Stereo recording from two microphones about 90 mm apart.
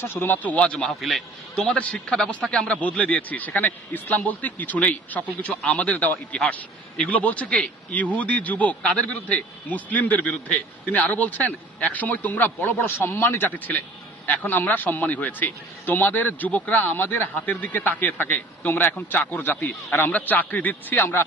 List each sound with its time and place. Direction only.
0.0 s a man's voice: 25° left (ahead or behind)
5.6 s a man's voice: 5° left (ahead or behind)
5.9 s a man's voice: 15° left (ahead or behind)